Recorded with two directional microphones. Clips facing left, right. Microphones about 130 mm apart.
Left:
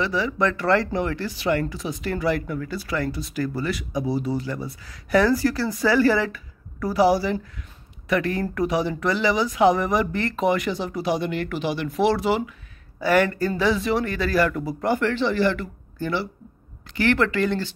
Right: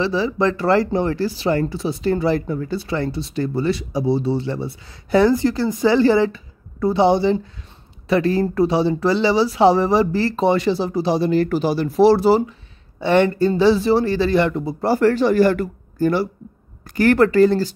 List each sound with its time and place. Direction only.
0.0 s speech: 30° right (ahead or behind)